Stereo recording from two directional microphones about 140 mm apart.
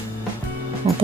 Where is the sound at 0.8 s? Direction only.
45° right (ahead or behind).